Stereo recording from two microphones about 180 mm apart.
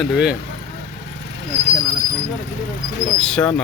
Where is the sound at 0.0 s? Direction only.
5° right (ahead or behind).